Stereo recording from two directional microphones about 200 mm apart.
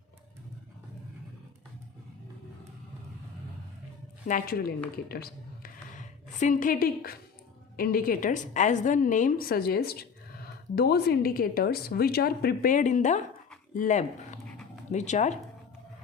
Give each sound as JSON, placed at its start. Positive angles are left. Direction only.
{"t": 4.3, "sound": "a woman's voice", "side_deg": 45}
{"t": 5.0, "sound": "a sound", "side_deg": 50}
{"t": 7.8, "sound": "a woman's voice", "side_deg": 45}